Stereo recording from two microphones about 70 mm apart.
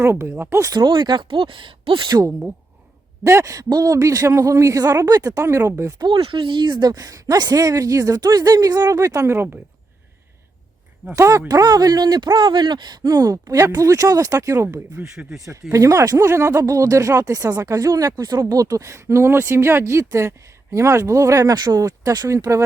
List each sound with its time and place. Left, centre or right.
0.0 s speech: right
0.6 s speech: right
2.1 s speech: right
3.5 s a woman's voice: right
6.6 s a woman's voice: right
11.1 s speech: right
11.4 s a woman's voice: right
15.0 s speech: centre
15.7 s speech: right
21.5 s speech: right
21.8 s speech: right
22.5 s speech: right